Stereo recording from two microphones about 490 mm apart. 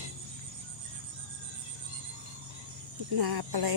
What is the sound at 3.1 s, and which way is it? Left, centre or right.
Speech, right.